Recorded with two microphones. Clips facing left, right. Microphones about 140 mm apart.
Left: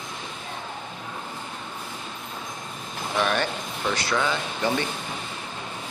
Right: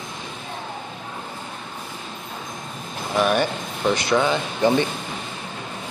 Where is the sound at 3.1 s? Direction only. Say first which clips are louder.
Right 5 dB; 10° right (ahead or behind).